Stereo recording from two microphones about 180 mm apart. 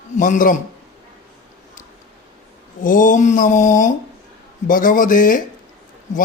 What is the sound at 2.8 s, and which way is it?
Speech, 45° left (ahead or behind).